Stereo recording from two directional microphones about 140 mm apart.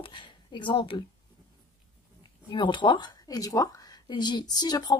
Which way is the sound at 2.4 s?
35° left (ahead or behind).